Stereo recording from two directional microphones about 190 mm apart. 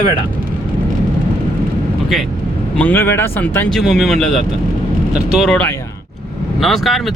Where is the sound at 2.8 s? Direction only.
10° left (ahead or behind).